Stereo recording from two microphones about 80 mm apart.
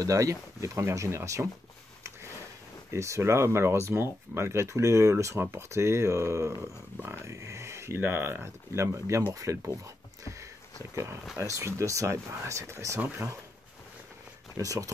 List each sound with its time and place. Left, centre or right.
0.0 s speech: right
2.9 s speech: right
10.2 s a sound: right
11.3 s speech: right
13.0 s speech: right
14.6 s speech: right